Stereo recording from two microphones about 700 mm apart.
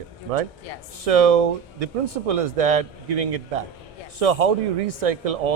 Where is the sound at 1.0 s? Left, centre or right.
Right.